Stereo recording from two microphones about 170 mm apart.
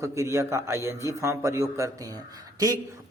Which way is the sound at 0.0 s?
15° right (ahead or behind).